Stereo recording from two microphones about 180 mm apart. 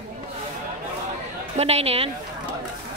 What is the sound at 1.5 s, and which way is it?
Speech, 35° right (ahead or behind).